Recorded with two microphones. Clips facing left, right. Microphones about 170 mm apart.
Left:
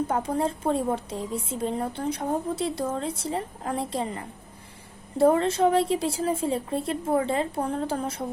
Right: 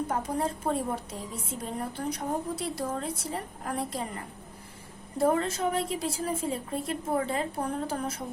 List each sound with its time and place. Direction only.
0.1 s a woman's voice: 30° left (ahead or behind)
5.1 s a woman's voice: 30° left (ahead or behind)